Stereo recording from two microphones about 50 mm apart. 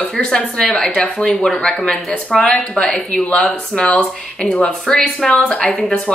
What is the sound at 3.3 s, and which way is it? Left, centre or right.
Speech, left.